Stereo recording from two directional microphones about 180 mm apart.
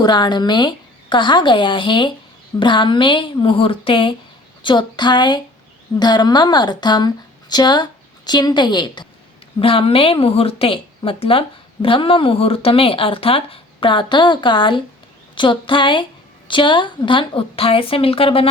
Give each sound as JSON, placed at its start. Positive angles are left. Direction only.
{"t": 0.0, "sound": "a woman's voice", "side_deg": 25}